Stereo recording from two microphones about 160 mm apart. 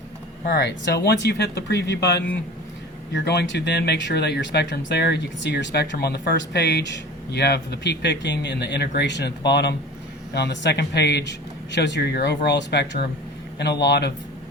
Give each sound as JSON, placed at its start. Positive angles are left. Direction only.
{"t": 0.4, "sound": "speech", "side_deg": 90}